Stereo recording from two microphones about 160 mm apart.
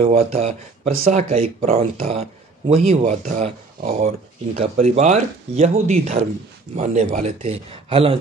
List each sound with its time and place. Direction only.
0.0 s speech: 40° right (ahead or behind)